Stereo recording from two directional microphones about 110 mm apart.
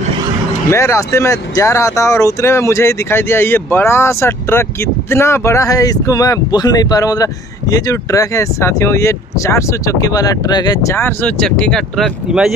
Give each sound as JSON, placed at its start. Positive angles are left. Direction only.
{"t": 0.7, "sound": "speech", "side_deg": 25}
{"t": 11.4, "sound": "speech", "side_deg": 5}
{"t": 12.3, "sound": "speech", "side_deg": -5}